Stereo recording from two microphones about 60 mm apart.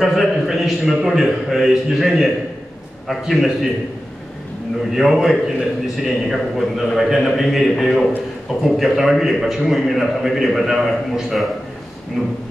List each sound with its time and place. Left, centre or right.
0.0 s a man's voice: centre
4.9 s a man's voice: centre